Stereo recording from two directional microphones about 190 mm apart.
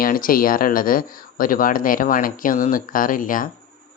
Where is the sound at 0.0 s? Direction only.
50° left (ahead or behind).